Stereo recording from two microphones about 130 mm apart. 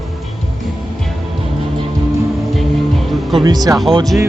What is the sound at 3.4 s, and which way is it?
Speech, 30° right (ahead or behind).